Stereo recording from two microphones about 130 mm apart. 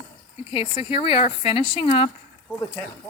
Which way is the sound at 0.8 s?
45° left (ahead or behind).